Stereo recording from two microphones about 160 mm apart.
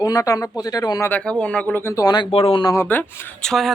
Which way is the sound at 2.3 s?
35° left (ahead or behind).